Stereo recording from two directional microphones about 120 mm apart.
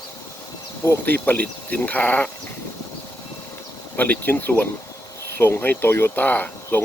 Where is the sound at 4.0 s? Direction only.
15° left (ahead or behind).